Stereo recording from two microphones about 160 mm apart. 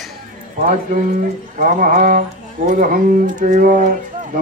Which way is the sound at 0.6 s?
55° right (ahead or behind).